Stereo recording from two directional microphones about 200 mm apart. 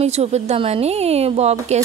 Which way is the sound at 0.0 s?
30° right (ahead or behind).